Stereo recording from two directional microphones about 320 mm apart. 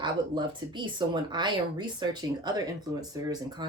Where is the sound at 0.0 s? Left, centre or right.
Centre.